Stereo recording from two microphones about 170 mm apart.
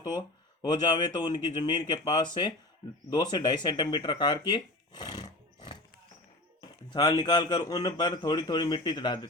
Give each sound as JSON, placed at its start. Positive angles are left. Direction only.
{"t": 0.0, "sound": "speech", "side_deg": 25}